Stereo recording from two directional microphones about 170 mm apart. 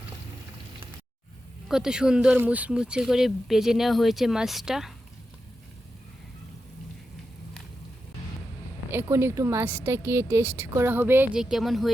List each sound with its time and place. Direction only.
1.6 s speech: 5° right (ahead or behind)
8.9 s a woman's voice: 15° right (ahead or behind)